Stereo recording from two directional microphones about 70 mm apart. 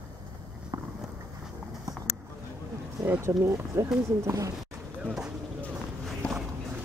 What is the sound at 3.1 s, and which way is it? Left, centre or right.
Speech, right.